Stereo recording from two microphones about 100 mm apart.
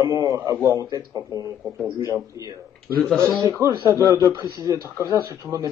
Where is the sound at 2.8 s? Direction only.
10° left (ahead or behind).